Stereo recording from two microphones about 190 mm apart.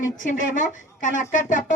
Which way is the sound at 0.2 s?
40° left (ahead or behind).